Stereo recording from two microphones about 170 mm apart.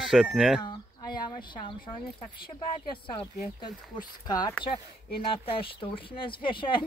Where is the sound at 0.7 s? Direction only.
25° left (ahead or behind).